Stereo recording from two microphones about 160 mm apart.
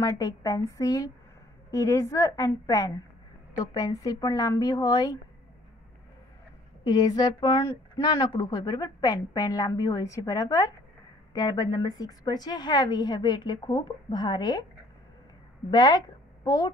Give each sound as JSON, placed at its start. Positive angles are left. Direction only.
{"t": 0.0, "sound": "a woman's voice", "side_deg": 20}
{"t": 6.8, "sound": "a woman's voice", "side_deg": 25}
{"t": 15.7, "sound": "a woman's voice", "side_deg": 25}